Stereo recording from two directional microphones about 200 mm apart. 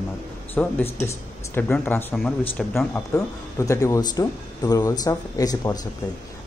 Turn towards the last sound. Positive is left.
turn(degrees=20)  # may be behind; listen again after turning